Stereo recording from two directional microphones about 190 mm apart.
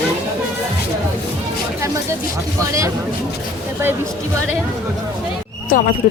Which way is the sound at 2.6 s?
15° right (ahead or behind).